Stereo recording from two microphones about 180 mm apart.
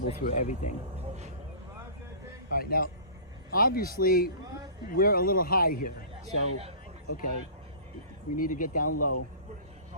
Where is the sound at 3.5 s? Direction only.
55° left (ahead or behind).